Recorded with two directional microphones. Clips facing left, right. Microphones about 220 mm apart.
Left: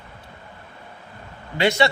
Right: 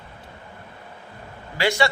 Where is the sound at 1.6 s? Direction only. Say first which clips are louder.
Left 2 dB; 20° left (ahead or behind).